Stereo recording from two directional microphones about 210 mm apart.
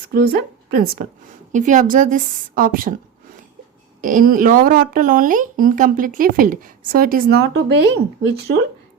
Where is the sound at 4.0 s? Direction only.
40° right (ahead or behind).